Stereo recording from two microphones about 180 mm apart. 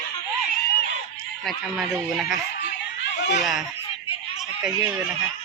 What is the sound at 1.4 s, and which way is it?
Speech, centre (ahead or behind).